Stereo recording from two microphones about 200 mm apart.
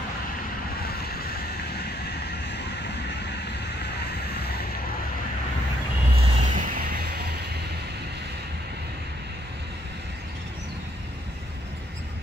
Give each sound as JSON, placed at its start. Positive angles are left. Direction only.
{"t": 6.1, "sound": "vehicle", "side_deg": -25}